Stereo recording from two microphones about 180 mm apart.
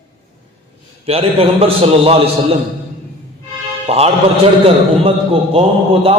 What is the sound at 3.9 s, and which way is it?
A man's voice, 35° right (ahead or behind).